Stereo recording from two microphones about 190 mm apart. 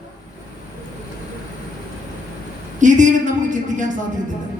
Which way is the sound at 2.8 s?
40° right (ahead or behind).